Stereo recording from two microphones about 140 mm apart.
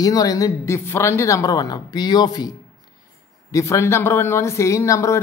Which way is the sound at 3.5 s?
20° left (ahead or behind).